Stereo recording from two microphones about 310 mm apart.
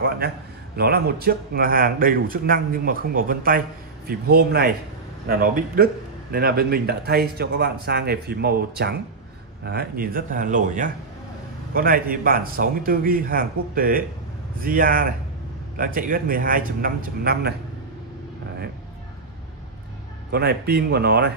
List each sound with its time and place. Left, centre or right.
0.7 s speech: right
20.2 s speech: right